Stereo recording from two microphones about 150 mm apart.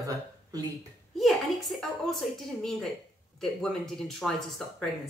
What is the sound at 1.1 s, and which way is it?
A woman's voice, centre (ahead or behind).